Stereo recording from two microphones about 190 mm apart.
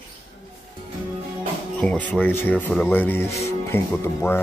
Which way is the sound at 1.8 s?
5° left (ahead or behind).